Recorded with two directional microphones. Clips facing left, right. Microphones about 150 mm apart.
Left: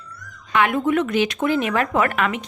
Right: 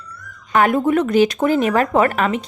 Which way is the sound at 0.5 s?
40° right (ahead or behind).